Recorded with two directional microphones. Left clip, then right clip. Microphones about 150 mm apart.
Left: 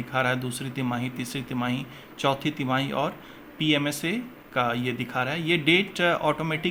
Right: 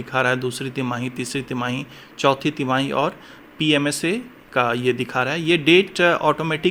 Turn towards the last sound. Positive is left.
turn(degrees=-30)  # may be behind; listen again after turning